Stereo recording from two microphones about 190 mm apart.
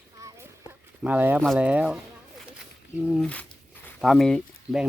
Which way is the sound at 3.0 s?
Centre (ahead or behind).